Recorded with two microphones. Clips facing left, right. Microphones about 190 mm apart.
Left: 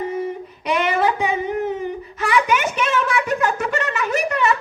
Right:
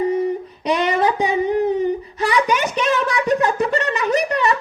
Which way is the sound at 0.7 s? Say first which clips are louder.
Right 1 dB; 35° right (ahead or behind).